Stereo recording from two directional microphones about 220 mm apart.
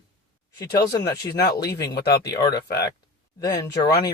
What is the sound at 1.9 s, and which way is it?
Speech, 50° left (ahead or behind).